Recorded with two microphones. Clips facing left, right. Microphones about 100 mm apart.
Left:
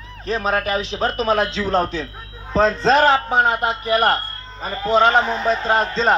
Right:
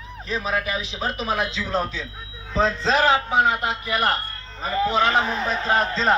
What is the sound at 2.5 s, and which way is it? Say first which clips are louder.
Speech: left 5 dB; 45° left (ahead or behind).